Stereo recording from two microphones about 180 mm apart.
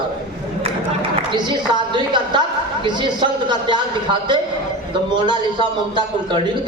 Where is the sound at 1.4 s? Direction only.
25° right (ahead or behind).